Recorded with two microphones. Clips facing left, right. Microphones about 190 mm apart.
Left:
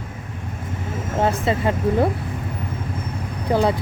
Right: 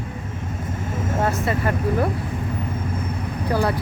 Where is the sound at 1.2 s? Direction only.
25° left (ahead or behind).